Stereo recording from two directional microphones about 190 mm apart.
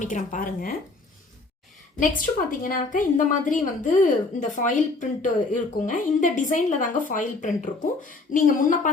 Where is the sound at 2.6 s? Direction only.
45° left (ahead or behind).